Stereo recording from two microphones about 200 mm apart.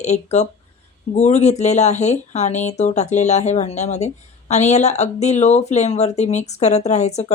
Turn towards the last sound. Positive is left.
turn(degrees=35)  # may be behind; listen again after turning